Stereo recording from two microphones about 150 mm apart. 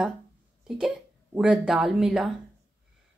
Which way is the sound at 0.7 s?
5° right (ahead or behind).